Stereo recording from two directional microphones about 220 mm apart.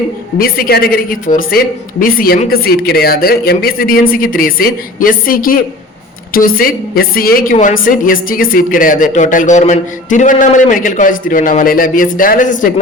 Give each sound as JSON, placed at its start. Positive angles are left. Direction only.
{"t": 0.3, "sound": "a woman's voice", "side_deg": 40}